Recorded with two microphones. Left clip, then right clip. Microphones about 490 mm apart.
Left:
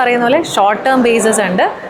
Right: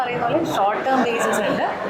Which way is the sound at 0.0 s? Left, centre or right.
Left.